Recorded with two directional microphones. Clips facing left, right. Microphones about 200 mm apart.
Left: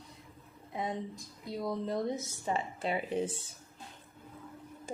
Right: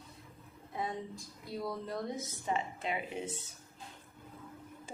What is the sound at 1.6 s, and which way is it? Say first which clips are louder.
Speech: left 5 dB; 20° left (ahead or behind).